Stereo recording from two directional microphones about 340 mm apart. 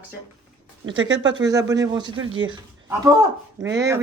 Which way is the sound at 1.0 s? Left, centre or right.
Right.